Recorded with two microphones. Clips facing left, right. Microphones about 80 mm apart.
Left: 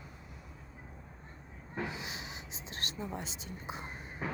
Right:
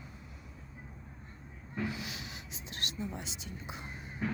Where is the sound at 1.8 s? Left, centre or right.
Left.